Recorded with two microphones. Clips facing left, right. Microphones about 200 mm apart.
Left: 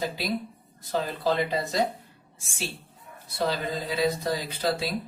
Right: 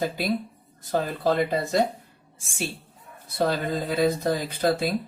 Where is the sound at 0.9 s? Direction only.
50° right (ahead or behind).